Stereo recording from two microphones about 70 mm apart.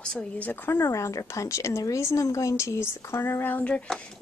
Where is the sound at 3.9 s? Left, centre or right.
Centre.